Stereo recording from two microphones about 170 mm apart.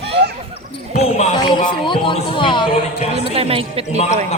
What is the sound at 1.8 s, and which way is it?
Speech, 30° left (ahead or behind).